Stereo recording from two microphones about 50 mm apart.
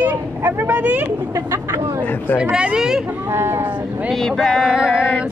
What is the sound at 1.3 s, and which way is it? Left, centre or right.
Speech, right.